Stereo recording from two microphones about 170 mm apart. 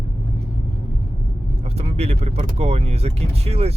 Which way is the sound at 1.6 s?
40° right (ahead or behind).